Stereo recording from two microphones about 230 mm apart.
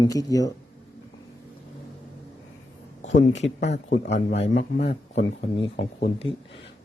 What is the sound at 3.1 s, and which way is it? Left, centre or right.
Speech, left.